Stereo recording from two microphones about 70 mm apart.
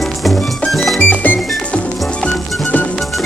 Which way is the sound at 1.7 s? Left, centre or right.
Centre.